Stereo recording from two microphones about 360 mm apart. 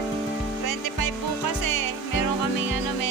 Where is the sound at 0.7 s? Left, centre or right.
Left.